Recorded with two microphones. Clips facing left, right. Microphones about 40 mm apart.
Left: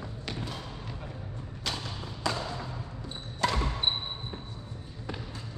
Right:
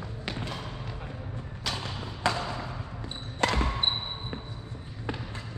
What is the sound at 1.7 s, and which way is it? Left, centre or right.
Thump, centre.